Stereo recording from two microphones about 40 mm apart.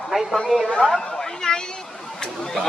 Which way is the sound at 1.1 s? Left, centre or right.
Centre.